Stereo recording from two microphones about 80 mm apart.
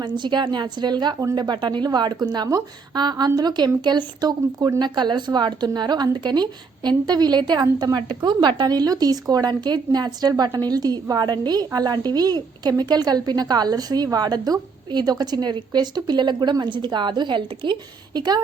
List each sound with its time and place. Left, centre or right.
0.0 s a woman's voice: right